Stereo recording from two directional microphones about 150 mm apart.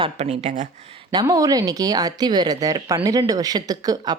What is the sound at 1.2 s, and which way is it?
Speech, 25° right (ahead or behind).